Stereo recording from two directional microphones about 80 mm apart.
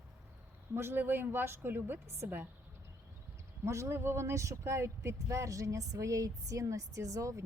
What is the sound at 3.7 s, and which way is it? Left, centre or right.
Speech, right.